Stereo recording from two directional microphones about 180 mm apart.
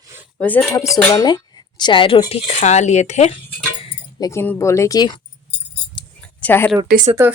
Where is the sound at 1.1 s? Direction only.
20° left (ahead or behind); by 3.3 s 40° left (ahead or behind).